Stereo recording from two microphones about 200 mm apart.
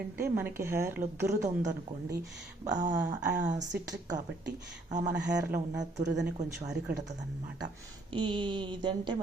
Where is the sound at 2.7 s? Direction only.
40° right (ahead or behind).